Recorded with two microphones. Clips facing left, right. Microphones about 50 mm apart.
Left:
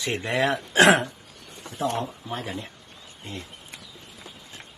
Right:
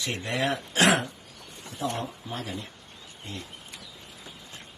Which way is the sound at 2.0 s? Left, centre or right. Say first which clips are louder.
Left 3 dB; left.